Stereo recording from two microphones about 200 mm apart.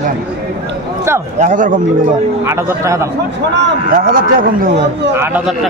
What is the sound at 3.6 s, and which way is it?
A man's voice, 45° right (ahead or behind).